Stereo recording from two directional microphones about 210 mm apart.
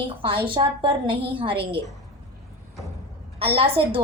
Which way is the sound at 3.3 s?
25° right (ahead or behind).